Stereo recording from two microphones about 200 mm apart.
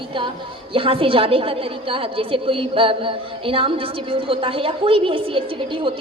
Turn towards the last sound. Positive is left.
turn(degrees=-25)  # may be behind; listen again after turning